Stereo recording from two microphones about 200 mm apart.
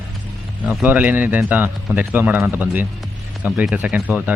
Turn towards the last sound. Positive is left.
turn(degrees=-5)  # may be behind; listen again after turning